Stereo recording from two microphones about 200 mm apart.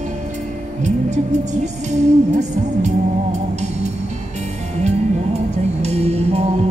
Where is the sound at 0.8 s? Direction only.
35° right (ahead or behind).